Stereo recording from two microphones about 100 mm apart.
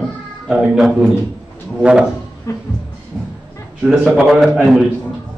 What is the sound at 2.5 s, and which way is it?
Speech, 30° left (ahead or behind).